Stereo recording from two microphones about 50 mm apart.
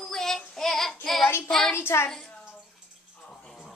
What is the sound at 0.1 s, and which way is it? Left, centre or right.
Child singing, centre.